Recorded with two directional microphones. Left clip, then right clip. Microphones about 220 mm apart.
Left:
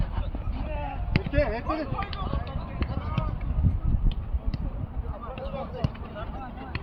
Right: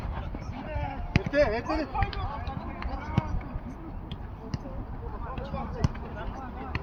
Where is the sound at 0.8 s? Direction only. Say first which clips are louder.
Even; 5° right (ahead or behind).